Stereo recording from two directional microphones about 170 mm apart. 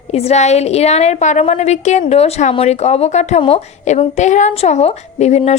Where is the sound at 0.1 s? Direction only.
40° left (ahead or behind).